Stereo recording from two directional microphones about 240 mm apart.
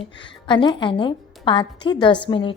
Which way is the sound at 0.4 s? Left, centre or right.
Centre.